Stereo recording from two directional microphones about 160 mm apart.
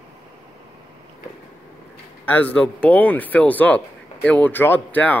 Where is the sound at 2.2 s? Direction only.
10° left (ahead or behind).